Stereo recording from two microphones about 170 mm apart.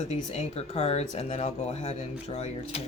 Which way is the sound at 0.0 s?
40° left (ahead or behind).